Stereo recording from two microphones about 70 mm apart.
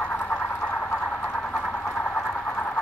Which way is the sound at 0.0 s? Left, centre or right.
Left.